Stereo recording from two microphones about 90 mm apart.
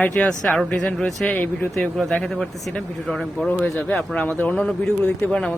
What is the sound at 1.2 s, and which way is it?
Speech, 20° left (ahead or behind).